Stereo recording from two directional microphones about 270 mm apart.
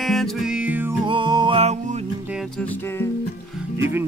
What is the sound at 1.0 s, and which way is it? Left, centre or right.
Music, centre.